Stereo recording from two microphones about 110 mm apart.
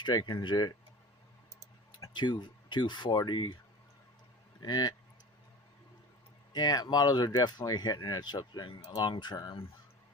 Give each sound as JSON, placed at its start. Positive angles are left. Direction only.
{"t": 0.0, "sound": "speech", "side_deg": 40}
{"t": 2.1, "sound": "speech", "side_deg": 45}
{"t": 4.6, "sound": "speech", "side_deg": 40}
{"t": 6.5, "sound": "speech", "side_deg": 35}